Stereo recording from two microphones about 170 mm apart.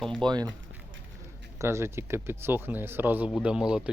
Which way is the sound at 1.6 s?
15° right (ahead or behind).